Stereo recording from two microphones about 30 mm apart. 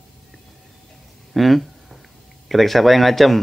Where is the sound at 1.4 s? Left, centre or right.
Centre.